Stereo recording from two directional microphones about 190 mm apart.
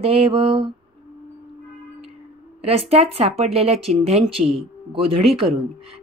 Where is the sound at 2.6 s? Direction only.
30° right (ahead or behind).